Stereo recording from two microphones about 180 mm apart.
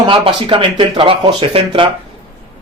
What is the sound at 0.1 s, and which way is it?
A man's voice, 30° right (ahead or behind).